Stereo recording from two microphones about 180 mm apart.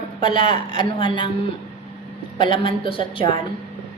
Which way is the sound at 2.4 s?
25° left (ahead or behind).